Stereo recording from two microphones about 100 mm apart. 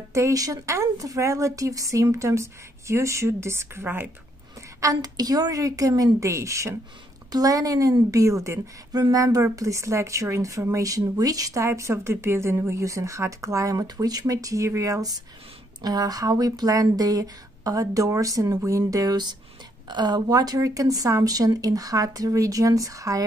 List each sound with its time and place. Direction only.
0.1 s a woman's voice: 35° right (ahead or behind)
4.7 s a woman's voice: 35° right (ahead or behind)